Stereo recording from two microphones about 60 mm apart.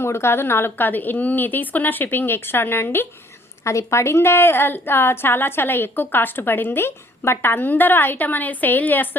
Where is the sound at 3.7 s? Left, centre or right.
Left.